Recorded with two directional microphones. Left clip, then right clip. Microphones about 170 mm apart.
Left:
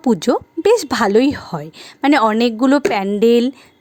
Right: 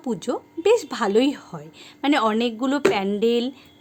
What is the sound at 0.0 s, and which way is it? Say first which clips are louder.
A woman's voice: left 11 dB; 45° left (ahead or behind).